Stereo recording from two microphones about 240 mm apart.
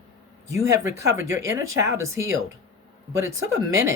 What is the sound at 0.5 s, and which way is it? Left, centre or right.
Speech, centre.